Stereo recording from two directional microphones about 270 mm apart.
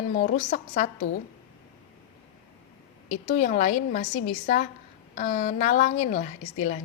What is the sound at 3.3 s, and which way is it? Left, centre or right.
Speech, left.